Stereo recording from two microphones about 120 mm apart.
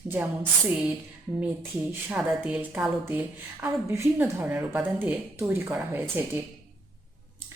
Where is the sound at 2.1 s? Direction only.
10° right (ahead or behind).